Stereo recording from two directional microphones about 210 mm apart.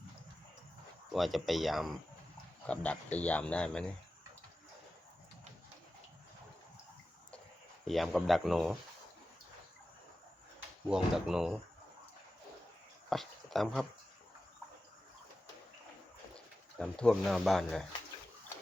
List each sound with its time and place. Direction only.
1.1 s speech: centre (ahead or behind)
7.9 s speech: centre (ahead or behind)
10.8 s speech: 5° right (ahead or behind)
13.1 s speech: centre (ahead or behind)
16.7 s speech: 5° left (ahead or behind)